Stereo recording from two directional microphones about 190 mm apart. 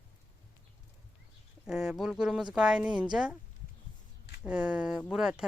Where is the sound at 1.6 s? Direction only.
5° right (ahead or behind).